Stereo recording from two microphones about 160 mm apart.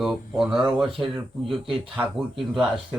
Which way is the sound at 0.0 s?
Centre (ahead or behind).